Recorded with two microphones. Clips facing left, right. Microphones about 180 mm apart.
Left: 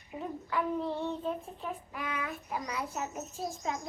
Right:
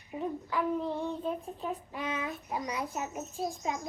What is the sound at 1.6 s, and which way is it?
A child's voice, 20° right (ahead or behind).